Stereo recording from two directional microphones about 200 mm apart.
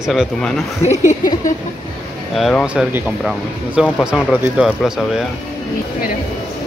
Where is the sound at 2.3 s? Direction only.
Centre (ahead or behind).